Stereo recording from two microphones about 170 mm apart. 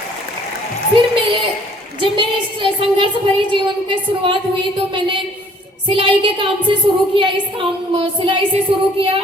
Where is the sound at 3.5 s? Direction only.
30° right (ahead or behind).